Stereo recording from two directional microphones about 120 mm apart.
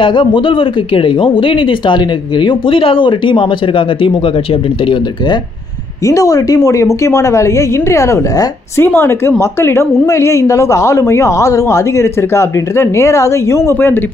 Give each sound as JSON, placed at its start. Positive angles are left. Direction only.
{"t": 0.0, "sound": "speech", "side_deg": 45}
{"t": 6.0, "sound": "a woman's voice", "side_deg": 30}